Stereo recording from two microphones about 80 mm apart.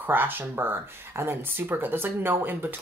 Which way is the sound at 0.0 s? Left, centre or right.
Right.